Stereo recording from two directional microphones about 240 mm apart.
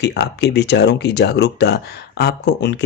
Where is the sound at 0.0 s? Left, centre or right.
Left.